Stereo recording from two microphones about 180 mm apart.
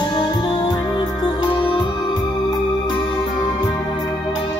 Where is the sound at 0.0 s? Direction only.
25° left (ahead or behind).